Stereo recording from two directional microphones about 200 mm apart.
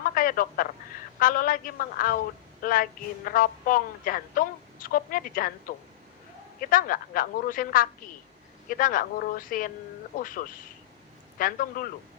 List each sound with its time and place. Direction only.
0.0 s telephone: 45° left (ahead or behind)
1.2 s a woman's voice: 45° left (ahead or behind)
2.6 s a sound: 45° left (ahead or behind)
3.2 s a woman's voice: 45° left (ahead or behind)